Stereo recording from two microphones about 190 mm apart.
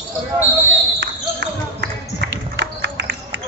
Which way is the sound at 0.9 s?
65° right (ahead or behind).